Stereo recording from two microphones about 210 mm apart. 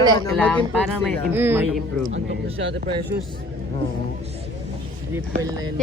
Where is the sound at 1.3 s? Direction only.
10° right (ahead or behind).